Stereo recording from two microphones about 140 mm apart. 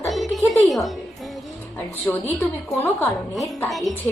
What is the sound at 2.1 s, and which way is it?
Speech, 15° left (ahead or behind).